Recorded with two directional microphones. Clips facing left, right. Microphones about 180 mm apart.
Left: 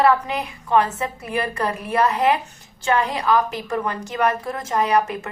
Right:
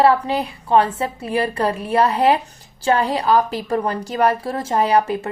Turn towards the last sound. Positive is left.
turn(degrees=-30)  # may be behind; listen again after turning